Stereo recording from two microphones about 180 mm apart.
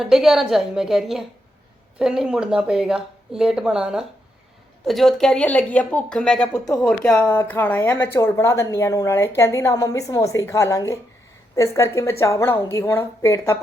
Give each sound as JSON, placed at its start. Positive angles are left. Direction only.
{"t": 0.0, "sound": "a woman's voice", "side_deg": 0}